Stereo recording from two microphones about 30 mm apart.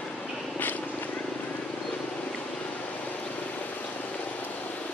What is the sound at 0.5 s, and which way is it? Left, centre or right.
Vehicle, left.